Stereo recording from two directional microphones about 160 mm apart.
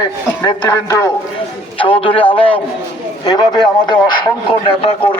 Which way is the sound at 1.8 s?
35° left (ahead or behind).